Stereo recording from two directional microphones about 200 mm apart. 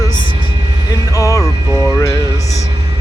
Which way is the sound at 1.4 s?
5° left (ahead or behind).